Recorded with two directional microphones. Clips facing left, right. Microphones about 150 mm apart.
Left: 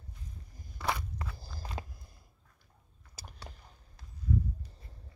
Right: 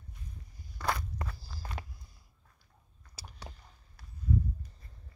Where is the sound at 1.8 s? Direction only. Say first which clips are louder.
Left 4 dB; 25° left (ahead or behind).